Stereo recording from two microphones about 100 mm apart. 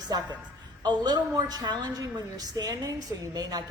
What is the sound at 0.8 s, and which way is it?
A woman's voice, 45° right (ahead or behind).